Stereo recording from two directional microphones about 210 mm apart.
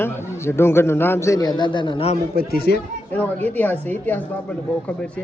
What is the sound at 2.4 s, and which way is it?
Speech, 45° left (ahead or behind).